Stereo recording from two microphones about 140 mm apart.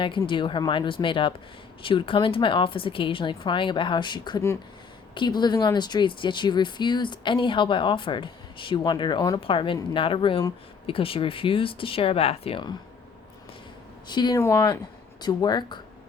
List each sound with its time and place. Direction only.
0.0 s speech: 35° left (ahead or behind)
14.1 s speech: 30° left (ahead or behind)
14.3 s speech: 20° left (ahead or behind)